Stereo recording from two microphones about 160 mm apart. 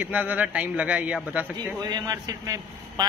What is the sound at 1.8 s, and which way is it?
Speech, 25° right (ahead or behind).